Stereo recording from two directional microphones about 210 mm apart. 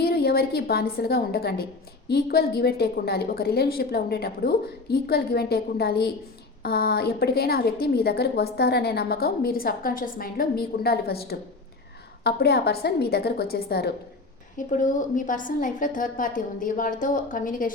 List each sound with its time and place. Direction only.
0.0 s a woman's voice: 45° left (ahead or behind)
14.7 s a woman's voice: 35° left (ahead or behind)